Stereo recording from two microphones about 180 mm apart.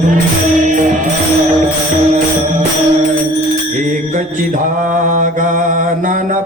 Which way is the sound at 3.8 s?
45° right (ahead or behind).